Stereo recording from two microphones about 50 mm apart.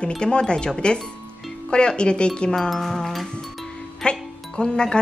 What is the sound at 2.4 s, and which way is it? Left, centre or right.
Music, centre.